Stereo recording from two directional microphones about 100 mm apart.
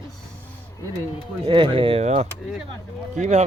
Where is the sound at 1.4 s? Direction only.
55° right (ahead or behind); by 2.3 s 80° right.